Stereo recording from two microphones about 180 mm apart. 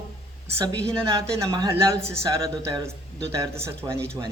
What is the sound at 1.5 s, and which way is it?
Speech, 20° right (ahead or behind).